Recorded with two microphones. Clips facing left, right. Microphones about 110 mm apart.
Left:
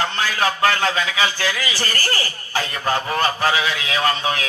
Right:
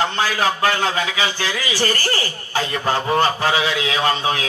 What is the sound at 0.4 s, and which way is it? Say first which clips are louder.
A man's voice: left 2 dB; 20° right (ahead or behind).